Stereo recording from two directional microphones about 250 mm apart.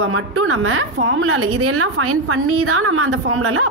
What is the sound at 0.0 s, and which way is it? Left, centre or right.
A woman's voice, right.